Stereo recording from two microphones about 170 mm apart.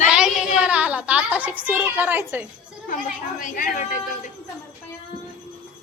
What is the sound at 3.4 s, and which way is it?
Speech, 55° left (ahead or behind).